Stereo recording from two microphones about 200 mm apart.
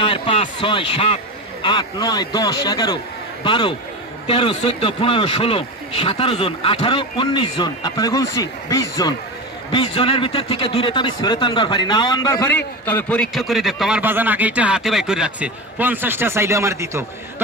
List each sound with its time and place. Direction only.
0.0 s a man's voice: 25° left (ahead or behind); by 17.0 s 15° right (ahead or behind)